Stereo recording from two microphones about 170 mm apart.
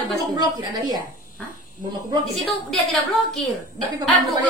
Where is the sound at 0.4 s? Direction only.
25° right (ahead or behind).